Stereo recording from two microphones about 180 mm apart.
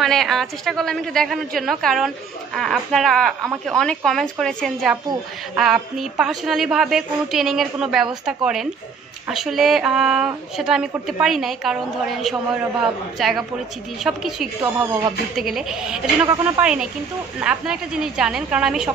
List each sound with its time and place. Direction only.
0.0 s a woman's voice: centre (ahead or behind)